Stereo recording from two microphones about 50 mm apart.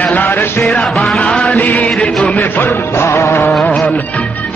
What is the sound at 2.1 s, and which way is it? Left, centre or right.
Music, centre.